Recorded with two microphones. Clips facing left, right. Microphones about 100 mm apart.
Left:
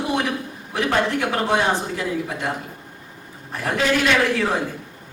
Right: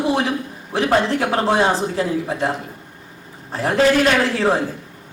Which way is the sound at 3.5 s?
35° right (ahead or behind).